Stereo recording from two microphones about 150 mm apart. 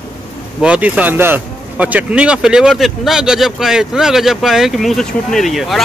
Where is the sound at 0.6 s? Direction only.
10° right (ahead or behind).